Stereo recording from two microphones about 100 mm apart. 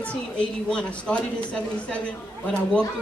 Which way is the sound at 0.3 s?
10° left (ahead or behind).